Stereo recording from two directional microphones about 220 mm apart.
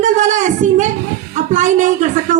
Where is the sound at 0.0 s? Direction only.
35° right (ahead or behind).